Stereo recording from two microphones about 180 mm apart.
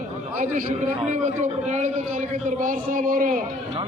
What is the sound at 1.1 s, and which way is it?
A man's voice, 40° right (ahead or behind).